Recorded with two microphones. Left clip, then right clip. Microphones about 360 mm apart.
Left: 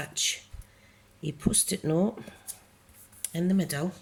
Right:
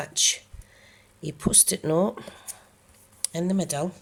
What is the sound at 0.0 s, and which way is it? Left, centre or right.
Speech, centre.